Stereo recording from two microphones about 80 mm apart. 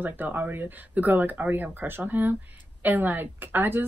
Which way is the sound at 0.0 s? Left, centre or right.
Right.